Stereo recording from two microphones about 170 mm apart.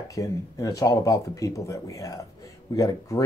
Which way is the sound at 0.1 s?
20° left (ahead or behind).